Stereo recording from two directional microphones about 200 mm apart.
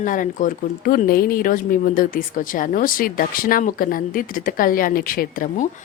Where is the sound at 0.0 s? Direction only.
40° left (ahead or behind).